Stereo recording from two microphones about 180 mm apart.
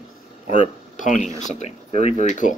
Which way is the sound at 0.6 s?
45° left (ahead or behind).